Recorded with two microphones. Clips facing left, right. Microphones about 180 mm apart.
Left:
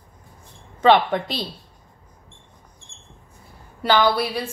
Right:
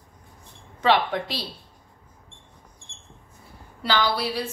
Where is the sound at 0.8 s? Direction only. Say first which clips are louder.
Left 5 dB; 55° left (ahead or behind).